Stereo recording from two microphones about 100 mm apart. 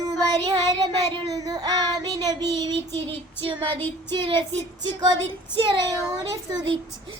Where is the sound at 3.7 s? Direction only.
20° left (ahead or behind).